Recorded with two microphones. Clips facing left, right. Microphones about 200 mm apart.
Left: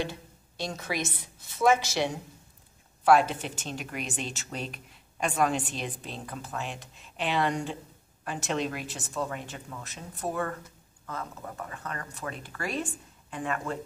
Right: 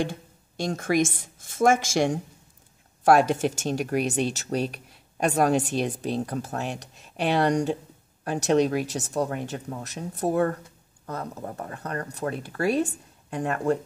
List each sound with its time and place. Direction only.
0.0 s a woman's voice: 50° right (ahead or behind)